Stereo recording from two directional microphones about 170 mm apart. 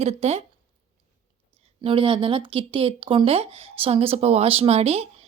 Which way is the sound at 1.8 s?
30° right (ahead or behind).